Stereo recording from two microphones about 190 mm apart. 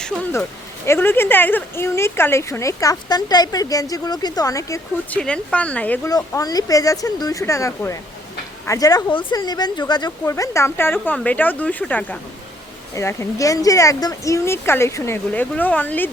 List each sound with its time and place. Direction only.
0.0 s speech: 10° left (ahead or behind)
5.2 s speech: 5° left (ahead or behind)
6.1 s speech: 20° left (ahead or behind)